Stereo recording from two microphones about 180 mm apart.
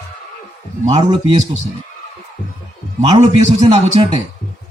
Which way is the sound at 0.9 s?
25° right (ahead or behind).